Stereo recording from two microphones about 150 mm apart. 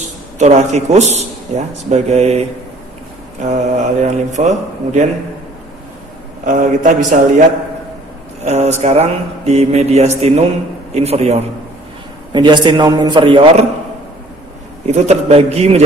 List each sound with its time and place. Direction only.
0.4 s speech: 50° right (ahead or behind)
6.4 s a man's voice: 60° right (ahead or behind)
8.5 s speech: 50° right (ahead or behind)
12.3 s a man's voice: 30° right (ahead or behind)
14.9 s speech: 45° right (ahead or behind)